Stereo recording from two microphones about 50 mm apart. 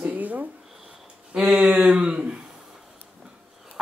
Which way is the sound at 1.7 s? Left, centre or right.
Right.